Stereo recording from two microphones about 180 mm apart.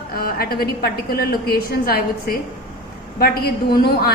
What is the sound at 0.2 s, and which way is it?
A woman's voice, 55° left (ahead or behind).